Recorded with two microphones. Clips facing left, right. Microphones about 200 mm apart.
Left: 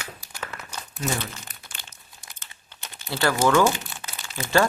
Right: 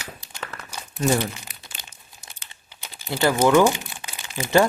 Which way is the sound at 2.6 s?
10° right (ahead or behind).